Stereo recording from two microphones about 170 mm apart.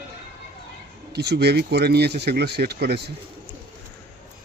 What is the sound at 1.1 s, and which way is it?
Speech, 75° right (ahead or behind).